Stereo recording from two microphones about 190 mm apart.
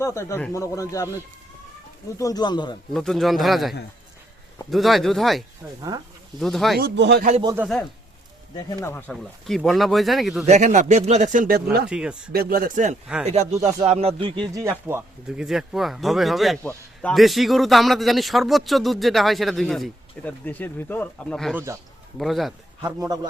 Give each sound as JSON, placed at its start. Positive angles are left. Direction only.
{"t": 0.0, "sound": "speech", "side_deg": 15}
{"t": 2.1, "sound": "speech", "side_deg": 20}
{"t": 2.9, "sound": "a man's voice", "side_deg": 0}
{"t": 6.7, "sound": "speech", "side_deg": -60}
{"t": 7.4, "sound": "speech", "side_deg": -10}
{"t": 8.5, "sound": "speech", "side_deg": 25}
{"t": 8.9, "sound": "a man's voice", "side_deg": 10}
{"t": 10.4, "sound": "speech", "side_deg": -40}
{"t": 11.9, "sound": "a man's voice", "side_deg": -5}
{"t": 12.3, "sound": "speech", "side_deg": -50}
{"t": 15.4, "sound": "a man's voice", "side_deg": 0}
{"t": 21.5, "sound": "speech", "side_deg": -15}
{"t": 22.2, "sound": "speech", "side_deg": 0}
{"t": 23.0, "sound": "speech", "side_deg": -20}